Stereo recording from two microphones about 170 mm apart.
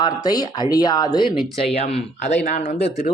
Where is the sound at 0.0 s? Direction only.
25° left (ahead or behind).